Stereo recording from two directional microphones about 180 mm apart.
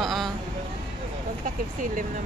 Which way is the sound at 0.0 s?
Centre (ahead or behind).